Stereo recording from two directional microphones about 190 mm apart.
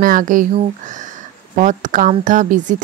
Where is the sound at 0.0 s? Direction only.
45° right (ahead or behind).